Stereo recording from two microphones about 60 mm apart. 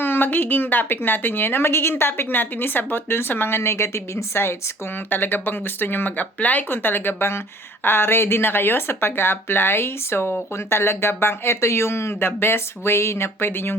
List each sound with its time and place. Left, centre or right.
0.0 s a woman's voice: left
5.0 s a woman's voice: left